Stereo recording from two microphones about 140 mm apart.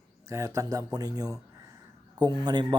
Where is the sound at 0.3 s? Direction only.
20° right (ahead or behind).